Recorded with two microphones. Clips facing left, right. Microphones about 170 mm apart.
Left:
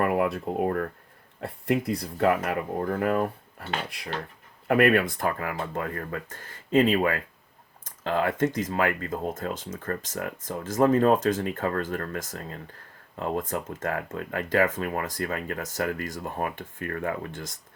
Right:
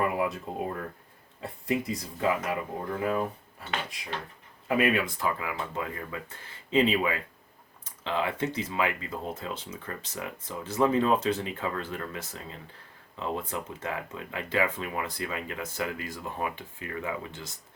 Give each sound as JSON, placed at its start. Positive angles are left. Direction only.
{"t": 0.0, "sound": "speech", "side_deg": 60}